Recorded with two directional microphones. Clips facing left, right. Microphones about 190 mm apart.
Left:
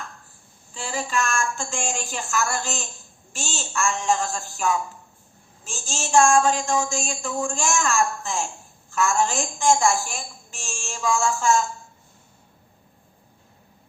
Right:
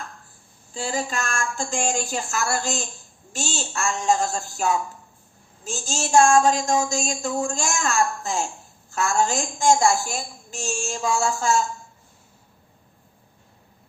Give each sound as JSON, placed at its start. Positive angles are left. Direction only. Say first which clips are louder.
{"t": 0.7, "sound": "a woman's voice", "louder": "right 1 dB", "side_deg": -40}